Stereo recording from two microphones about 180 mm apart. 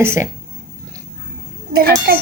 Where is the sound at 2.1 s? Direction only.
55° right (ahead or behind).